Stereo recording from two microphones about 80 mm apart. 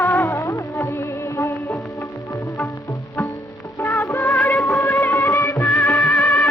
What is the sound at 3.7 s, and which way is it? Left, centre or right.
Music, left.